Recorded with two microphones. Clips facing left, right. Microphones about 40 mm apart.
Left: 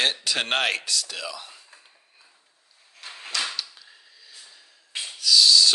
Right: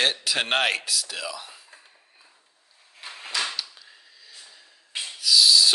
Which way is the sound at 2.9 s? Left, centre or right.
Centre.